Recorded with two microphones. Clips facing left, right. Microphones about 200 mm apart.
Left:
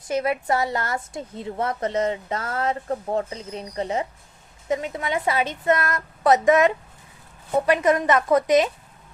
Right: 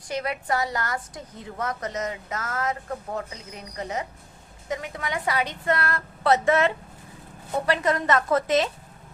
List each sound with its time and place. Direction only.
0.1 s a woman's voice: 25° left (ahead or behind)